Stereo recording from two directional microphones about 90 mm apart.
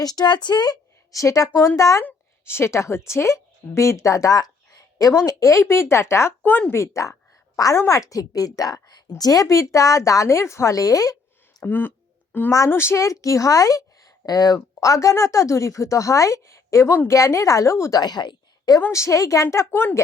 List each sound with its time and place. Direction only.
0.0 s speech: 45° left (ahead or behind)
1.1 s a woman's voice: 40° left (ahead or behind)
11.6 s a sound: 20° left (ahead or behind)
12.5 s a woman's voice: 35° left (ahead or behind)
18.0 s a sound: 50° left (ahead or behind)
18.9 s a woman's voice: 35° left (ahead or behind)